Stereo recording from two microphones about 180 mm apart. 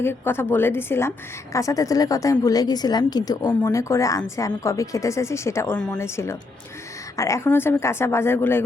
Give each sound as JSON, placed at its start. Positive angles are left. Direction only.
{"t": 0.0, "sound": "a woman's voice", "side_deg": 15}